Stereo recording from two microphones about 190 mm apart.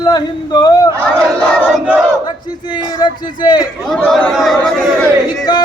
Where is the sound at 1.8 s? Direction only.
5° right (ahead or behind).